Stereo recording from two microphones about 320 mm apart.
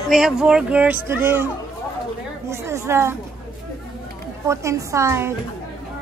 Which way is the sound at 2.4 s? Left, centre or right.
Centre.